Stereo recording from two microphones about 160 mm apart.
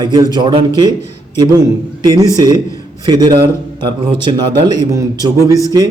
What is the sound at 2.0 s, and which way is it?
A man's voice, 25° right (ahead or behind).